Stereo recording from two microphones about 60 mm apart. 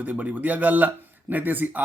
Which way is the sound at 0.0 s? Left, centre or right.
Right.